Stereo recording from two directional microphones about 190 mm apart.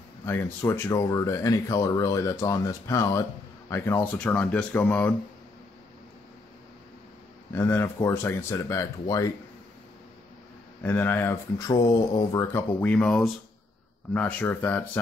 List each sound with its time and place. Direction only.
0.2 s speech: 10° left (ahead or behind)
7.5 s speech: 10° left (ahead or behind)
10.8 s speech: 10° left (ahead or behind)